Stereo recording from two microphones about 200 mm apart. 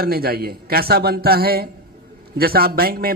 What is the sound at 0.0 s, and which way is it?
Speech, 50° right (ahead or behind).